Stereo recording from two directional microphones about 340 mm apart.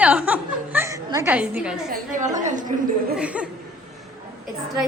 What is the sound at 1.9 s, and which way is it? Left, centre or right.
Speech, right.